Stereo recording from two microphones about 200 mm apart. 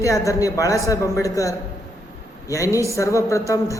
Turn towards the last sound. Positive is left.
turn(degrees=15)  # may be behind; listen again after turning